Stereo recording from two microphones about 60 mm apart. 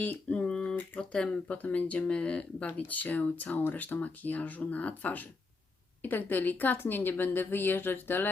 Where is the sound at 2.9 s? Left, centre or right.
Left.